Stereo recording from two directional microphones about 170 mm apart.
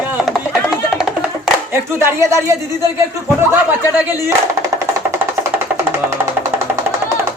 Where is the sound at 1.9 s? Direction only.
15° right (ahead or behind).